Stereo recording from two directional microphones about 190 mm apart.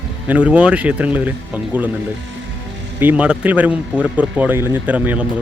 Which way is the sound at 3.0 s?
10° right (ahead or behind).